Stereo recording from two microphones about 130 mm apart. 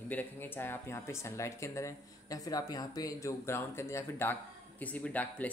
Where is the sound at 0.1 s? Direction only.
15° left (ahead or behind).